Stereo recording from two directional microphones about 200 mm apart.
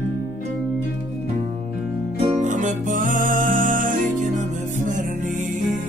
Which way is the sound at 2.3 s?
40° right (ahead or behind).